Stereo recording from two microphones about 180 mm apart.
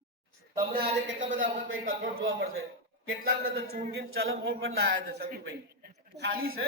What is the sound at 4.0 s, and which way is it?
A man's voice, 80° right.